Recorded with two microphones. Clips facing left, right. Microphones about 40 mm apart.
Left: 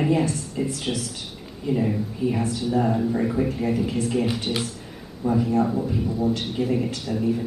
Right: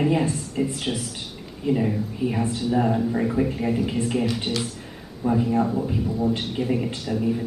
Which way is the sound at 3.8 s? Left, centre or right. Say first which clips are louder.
Even; right.